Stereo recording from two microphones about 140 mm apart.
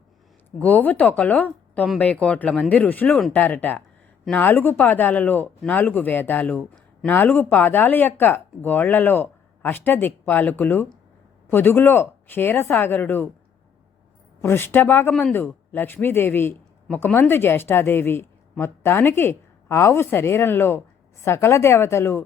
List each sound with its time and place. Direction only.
0.6 s speech: 10° left (ahead or behind)
14.4 s a woman's voice: 15° left (ahead or behind)